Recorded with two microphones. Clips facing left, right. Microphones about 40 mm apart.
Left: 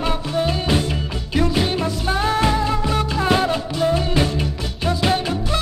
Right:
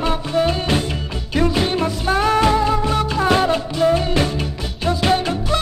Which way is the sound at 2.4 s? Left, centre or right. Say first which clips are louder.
Right 3 dB; centre.